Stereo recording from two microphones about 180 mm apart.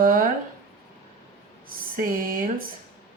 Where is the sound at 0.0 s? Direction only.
50° right (ahead or behind).